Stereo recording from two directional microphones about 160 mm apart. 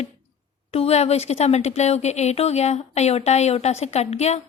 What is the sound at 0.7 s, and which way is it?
Speech, 40° left (ahead or behind).